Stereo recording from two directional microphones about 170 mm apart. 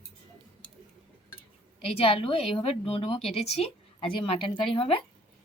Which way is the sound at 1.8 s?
35° left (ahead or behind).